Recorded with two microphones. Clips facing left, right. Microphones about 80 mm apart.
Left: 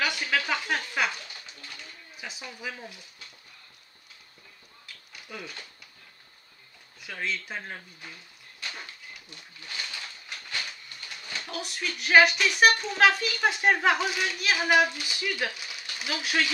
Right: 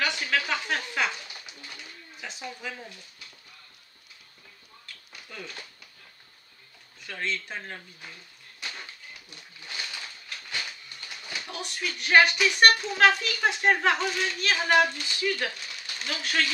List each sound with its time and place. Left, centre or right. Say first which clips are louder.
0.0 s a sound: even; centre
2.1 s a sound: even; centre
2.6 s speech: even; centre
4.8 s dog: left 1 dB; centre
7.0 s speech: right 1 dB; centre
8.6 s dog: even; centre
11.2 s speech: left 1 dB; centre